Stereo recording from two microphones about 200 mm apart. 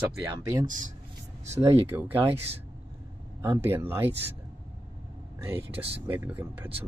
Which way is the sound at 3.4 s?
10° right (ahead or behind).